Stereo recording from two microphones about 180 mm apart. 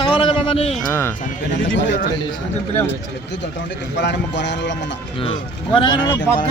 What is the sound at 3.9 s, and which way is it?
Speech, 75° left (ahead or behind).